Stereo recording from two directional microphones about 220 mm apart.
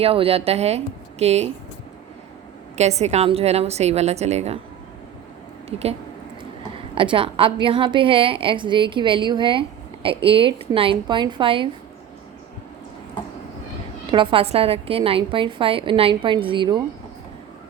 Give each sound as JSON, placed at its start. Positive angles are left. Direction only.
{"t": 0.0, "sound": "a woman's voice", "side_deg": -25}
{"t": 2.7, "sound": "a woman's voice", "side_deg": -30}
{"t": 6.7, "sound": "a woman's voice", "side_deg": -25}
{"t": 14.1, "sound": "a woman's voice", "side_deg": -20}